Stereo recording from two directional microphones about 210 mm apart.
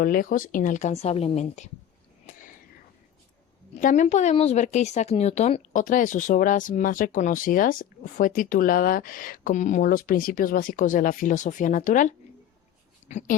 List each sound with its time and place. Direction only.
0.0 s speech: 40° left (ahead or behind)
3.8 s speech: 35° left (ahead or behind)